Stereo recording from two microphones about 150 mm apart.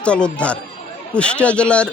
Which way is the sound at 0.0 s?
5° left (ahead or behind).